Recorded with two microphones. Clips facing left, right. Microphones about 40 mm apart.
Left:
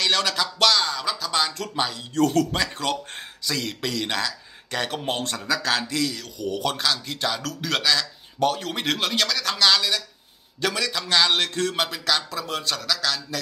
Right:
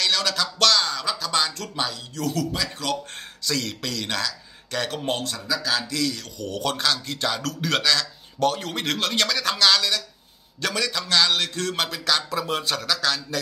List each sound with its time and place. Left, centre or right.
0.0 s music: left
0.6 s music: centre
2.1 s speech: left
3.2 s speech: centre
5.2 s speech: left
6.1 s speech: centre
8.7 s music: centre
9.2 s speech: centre
9.6 s music: centre
11.6 s speech: centre